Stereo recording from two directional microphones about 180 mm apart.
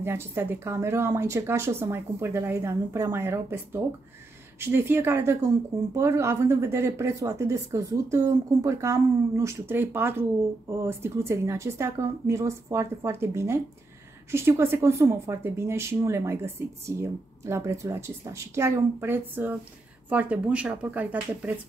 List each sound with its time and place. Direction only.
0.0 s speech: 15° right (ahead or behind)